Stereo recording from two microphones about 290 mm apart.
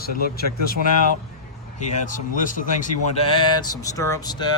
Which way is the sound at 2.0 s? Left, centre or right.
Left.